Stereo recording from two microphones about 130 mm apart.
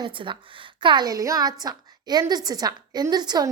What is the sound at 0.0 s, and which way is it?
A woman's voice, 40° right (ahead or behind).